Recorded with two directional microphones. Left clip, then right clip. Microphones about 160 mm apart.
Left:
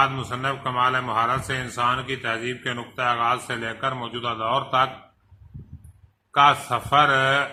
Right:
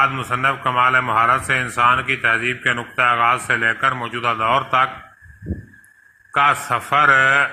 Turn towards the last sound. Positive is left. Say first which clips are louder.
# right 5 dB
turn(degrees=-20)  # may be behind; listen again after turning